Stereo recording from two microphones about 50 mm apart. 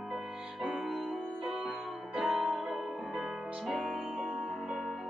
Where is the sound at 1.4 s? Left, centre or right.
Centre.